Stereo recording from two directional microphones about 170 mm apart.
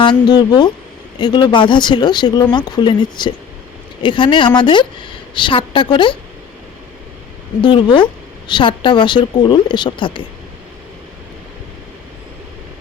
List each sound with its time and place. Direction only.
0.0 s speech: 25° left (ahead or behind)
7.6 s speech: 30° left (ahead or behind)